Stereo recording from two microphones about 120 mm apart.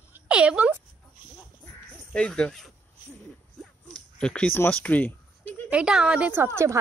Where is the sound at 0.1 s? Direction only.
10° right (ahead or behind).